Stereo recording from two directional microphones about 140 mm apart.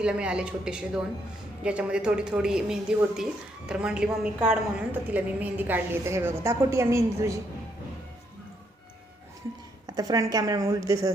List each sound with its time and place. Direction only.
0.0 s a woman's voice: 5° right (ahead or behind)
9.8 s speech: 25° right (ahead or behind)